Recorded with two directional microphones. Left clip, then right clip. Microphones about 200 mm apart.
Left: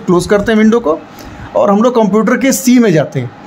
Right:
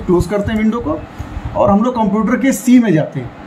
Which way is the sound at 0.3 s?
55° left (ahead or behind).